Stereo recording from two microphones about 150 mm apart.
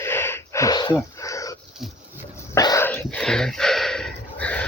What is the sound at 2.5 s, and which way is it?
Dog, 20° left (ahead or behind).